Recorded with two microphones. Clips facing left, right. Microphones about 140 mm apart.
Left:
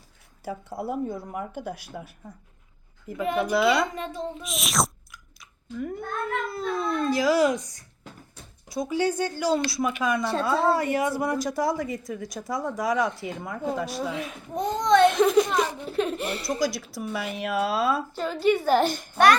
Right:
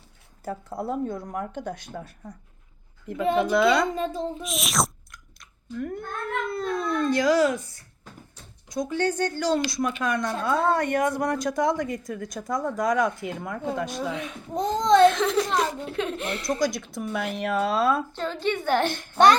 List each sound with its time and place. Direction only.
0.4 s a woman's voice: centre (ahead or behind)
3.9 s speech: 30° right (ahead or behind)
4.4 s speech: centre (ahead or behind)
8.7 s a woman's voice: 5° left (ahead or behind)
15.0 s speech: 15° left (ahead or behind)
15.8 s a woman's voice: 5° left (ahead or behind)